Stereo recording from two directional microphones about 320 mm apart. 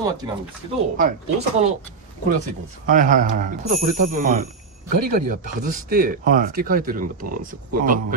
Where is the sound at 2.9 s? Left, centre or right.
Right.